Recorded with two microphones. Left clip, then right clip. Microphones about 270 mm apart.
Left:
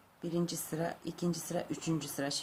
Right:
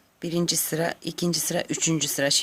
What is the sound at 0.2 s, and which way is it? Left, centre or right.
A woman's voice, right.